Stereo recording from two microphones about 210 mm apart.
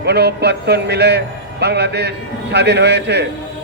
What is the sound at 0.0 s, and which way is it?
A man's voice, 50° right (ahead or behind).